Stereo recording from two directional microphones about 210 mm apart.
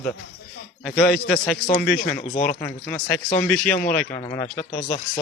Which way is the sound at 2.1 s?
35° left (ahead or behind).